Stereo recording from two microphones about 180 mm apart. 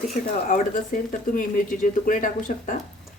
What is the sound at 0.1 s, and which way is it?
Speech, 45° left (ahead or behind).